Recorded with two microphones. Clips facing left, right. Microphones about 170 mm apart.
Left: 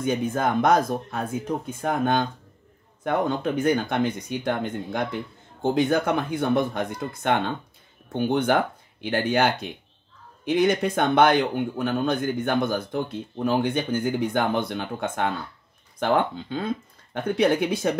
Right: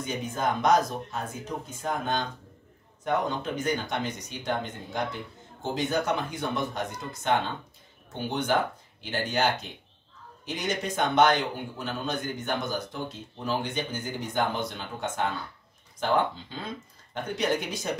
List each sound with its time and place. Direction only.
0.0 s speech: 55° left (ahead or behind)